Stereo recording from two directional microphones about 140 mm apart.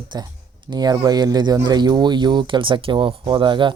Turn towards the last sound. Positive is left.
turn(degrees=-35)  # may be behind; listen again after turning